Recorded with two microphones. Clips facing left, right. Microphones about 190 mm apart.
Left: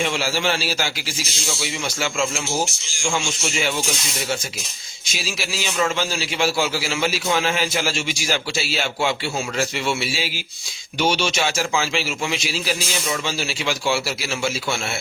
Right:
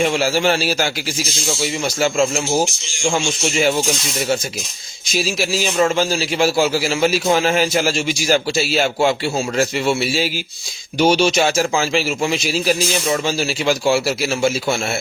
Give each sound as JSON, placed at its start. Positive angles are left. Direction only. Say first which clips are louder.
{"t": 0.0, "sound": "a man's voice", "louder": "right 6 dB", "side_deg": -45}
{"t": 5.1, "sound": "a man's voice", "louder": "right 9 dB", "side_deg": -45}